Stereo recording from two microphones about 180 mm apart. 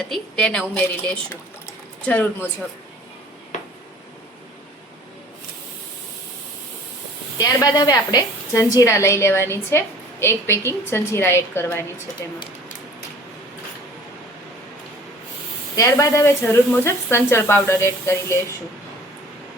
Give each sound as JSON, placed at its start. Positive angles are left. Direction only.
{"t": 0.1, "sound": "a woman's voice", "side_deg": 5}
{"t": 7.3, "sound": "a woman's voice", "side_deg": 20}
{"t": 15.7, "sound": "a woman's voice", "side_deg": 20}